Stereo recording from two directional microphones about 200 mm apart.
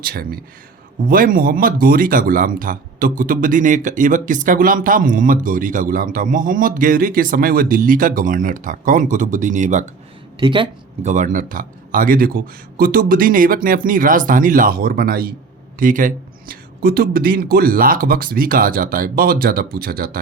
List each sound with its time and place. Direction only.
0.0 s speech: 50° right (ahead or behind)
10.4 s speech: 25° right (ahead or behind)
11.1 s speech: 40° right (ahead or behind)